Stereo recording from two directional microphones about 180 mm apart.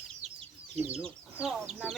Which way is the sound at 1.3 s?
5° right (ahead or behind).